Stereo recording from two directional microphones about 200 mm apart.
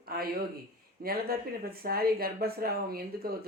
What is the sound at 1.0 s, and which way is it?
Speech, 50° right (ahead or behind).